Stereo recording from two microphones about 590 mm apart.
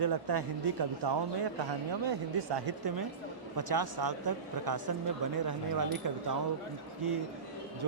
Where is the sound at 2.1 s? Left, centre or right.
Right.